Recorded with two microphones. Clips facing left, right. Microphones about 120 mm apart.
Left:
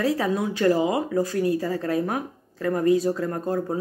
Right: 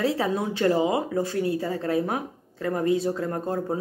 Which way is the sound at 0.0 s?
25° right (ahead or behind).